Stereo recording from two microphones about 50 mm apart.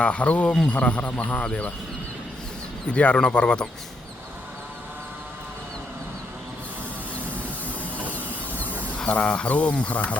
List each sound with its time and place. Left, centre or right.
0.0 s speech: left
2.8 s speech: left
9.0 s speech: left